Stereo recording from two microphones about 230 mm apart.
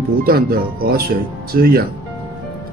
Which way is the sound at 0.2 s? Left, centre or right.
Right.